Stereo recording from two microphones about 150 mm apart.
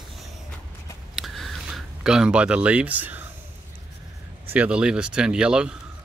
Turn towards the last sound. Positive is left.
turn(degrees=-5)  # may be behind; listen again after turning